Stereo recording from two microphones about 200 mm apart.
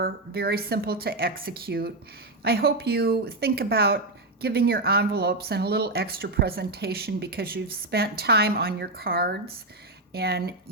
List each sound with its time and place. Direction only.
0.0 s speech: 50° right (ahead or behind)